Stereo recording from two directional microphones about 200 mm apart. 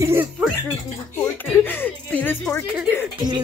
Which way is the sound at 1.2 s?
5° left (ahead or behind).